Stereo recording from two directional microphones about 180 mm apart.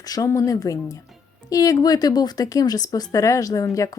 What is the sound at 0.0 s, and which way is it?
A woman's voice, 20° left (ahead or behind).